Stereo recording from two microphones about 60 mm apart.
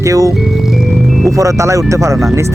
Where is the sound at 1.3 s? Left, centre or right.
Right.